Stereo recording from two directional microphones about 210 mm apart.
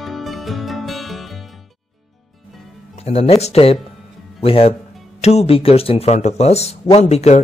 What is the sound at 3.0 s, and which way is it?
Speech, 30° left (ahead or behind).